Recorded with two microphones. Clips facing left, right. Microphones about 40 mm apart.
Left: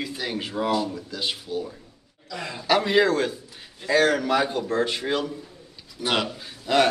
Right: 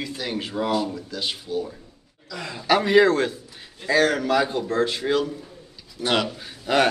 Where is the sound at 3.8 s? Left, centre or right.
Centre.